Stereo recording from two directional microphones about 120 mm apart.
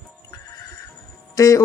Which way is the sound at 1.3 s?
25° left (ahead or behind).